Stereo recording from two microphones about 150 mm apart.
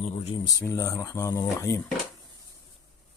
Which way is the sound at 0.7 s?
20° left (ahead or behind).